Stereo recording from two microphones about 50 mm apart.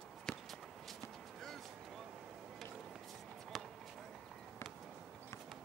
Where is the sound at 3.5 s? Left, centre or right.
Centre.